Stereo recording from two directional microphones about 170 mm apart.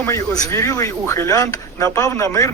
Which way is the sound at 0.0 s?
20° left (ahead or behind).